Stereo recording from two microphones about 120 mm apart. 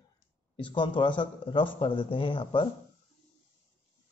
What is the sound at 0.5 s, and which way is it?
Speech, 45° left (ahead or behind).